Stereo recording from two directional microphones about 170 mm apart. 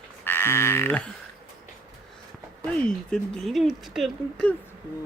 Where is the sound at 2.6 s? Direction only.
5° left (ahead or behind).